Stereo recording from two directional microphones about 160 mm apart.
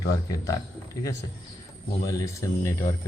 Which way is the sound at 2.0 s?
20° left (ahead or behind).